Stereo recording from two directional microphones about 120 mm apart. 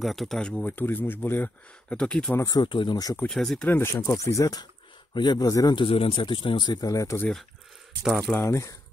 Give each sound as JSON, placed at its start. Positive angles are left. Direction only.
{"t": 0.0, "sound": "speech", "side_deg": 0}
{"t": 2.3, "sound": "speech", "side_deg": 25}
{"t": 2.6, "sound": "speech", "side_deg": 40}
{"t": 3.3, "sound": "speech", "side_deg": 5}
{"t": 5.8, "sound": "speech", "side_deg": 50}
{"t": 8.0, "sound": "speech", "side_deg": 0}
{"t": 8.4, "sound": "speech", "side_deg": 20}